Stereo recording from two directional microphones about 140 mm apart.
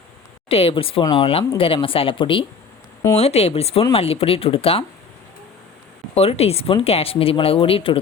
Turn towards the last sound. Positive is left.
turn(degrees=40)  # may be behind; listen again after turning